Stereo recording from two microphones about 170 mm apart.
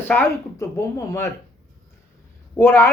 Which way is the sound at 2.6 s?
15° left (ahead or behind).